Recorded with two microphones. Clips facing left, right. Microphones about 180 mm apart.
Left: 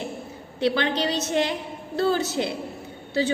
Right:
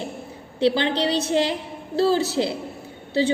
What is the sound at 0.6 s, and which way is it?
A woman's voice, 30° right (ahead or behind).